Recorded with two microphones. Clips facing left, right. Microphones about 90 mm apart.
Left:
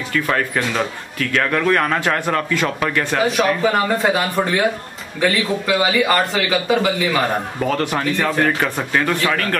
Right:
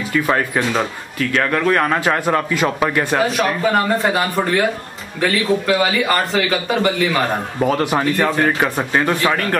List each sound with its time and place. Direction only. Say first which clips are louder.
0.1 s speech: right 2 dB; 15° right (ahead or behind); by 7.2 s centre (ahead or behind)
7.6 s speech: right 4 dB; 10° right (ahead or behind)
8.5 s speech: right 2 dB; 15° right (ahead or behind)